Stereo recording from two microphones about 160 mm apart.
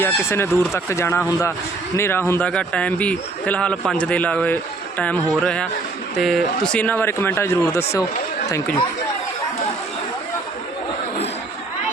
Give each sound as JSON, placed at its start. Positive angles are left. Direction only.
{"t": 0.0, "sound": "speech", "side_deg": 15}